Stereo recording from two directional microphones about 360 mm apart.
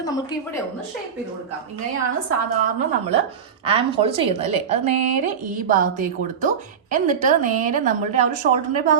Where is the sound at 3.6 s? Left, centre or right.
Centre.